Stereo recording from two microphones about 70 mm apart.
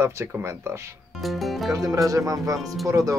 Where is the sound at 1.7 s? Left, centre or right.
Right.